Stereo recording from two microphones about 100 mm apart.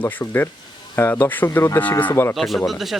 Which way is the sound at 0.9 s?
20° left (ahead or behind).